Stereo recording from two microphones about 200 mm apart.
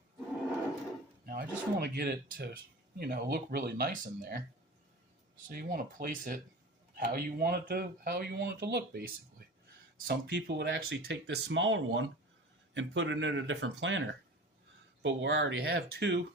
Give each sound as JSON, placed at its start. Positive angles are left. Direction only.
{"t": 1.2, "sound": "speech", "side_deg": -50}
{"t": 5.5, "sound": "speech", "side_deg": -45}